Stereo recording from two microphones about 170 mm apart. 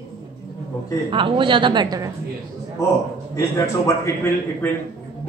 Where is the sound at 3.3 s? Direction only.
15° left (ahead or behind).